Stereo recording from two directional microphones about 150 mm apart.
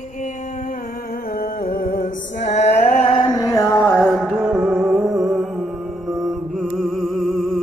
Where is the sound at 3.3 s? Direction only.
20° left (ahead or behind).